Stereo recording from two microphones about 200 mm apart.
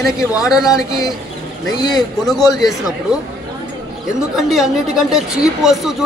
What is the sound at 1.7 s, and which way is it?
Speech, 20° left (ahead or behind).